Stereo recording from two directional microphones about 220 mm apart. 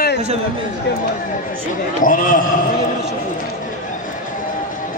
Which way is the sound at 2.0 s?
40° left (ahead or behind).